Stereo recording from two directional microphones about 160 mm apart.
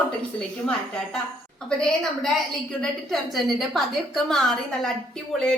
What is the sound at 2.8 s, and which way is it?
A woman's voice, centre (ahead or behind).